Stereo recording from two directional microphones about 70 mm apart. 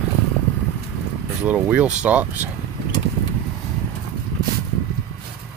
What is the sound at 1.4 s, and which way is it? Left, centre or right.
Speech, centre.